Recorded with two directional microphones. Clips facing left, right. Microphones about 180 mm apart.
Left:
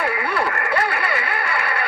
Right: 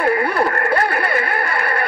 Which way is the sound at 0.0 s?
45° right (ahead or behind).